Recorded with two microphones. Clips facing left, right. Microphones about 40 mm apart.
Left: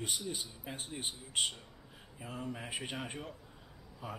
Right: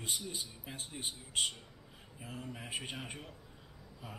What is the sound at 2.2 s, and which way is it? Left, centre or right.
Speech, centre.